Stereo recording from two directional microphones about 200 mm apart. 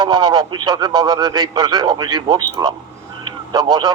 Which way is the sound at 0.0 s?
20° right (ahead or behind).